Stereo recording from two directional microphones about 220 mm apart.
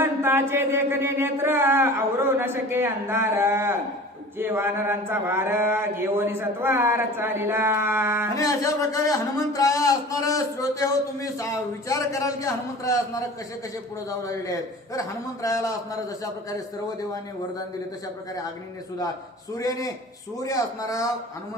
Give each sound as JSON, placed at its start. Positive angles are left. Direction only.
{"t": 0.0, "sound": "speech", "side_deg": -10}
{"t": 8.4, "sound": "speech", "side_deg": 15}
{"t": 14.9, "sound": "speech", "side_deg": 15}
{"t": 19.5, "sound": "speech", "side_deg": 15}